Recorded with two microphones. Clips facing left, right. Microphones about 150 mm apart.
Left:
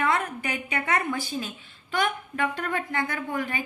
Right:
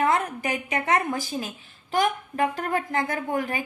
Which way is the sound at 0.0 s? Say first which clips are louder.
Right 3 dB; 45° right (ahead or behind).